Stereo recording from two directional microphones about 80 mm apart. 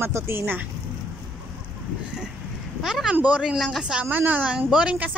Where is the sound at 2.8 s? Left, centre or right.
Centre.